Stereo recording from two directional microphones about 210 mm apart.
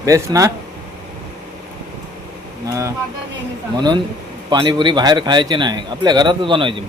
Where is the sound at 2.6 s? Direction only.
15° right (ahead or behind).